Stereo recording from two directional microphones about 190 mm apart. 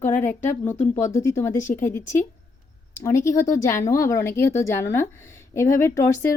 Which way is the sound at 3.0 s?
15° left (ahead or behind).